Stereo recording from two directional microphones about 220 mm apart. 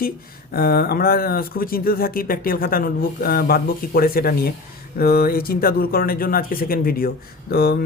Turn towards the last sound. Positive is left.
turn(degrees=45)  # may be behind; listen again after turning